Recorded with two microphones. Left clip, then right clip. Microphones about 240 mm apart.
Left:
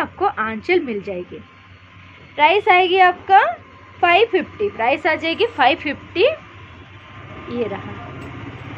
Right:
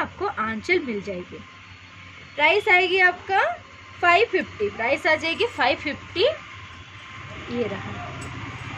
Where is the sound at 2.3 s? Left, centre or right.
Centre.